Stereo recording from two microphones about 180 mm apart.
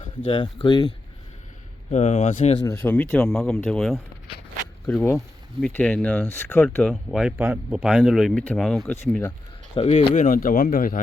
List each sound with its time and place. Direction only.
0.3 s speech: 30° left (ahead or behind)
1.9 s speech: 40° left (ahead or behind)
2.6 s speech: 10° left (ahead or behind)
6.9 s speech: 5° right (ahead or behind)
9.7 s speech: 30° left (ahead or behind)
10.2 s speech: 45° left (ahead or behind)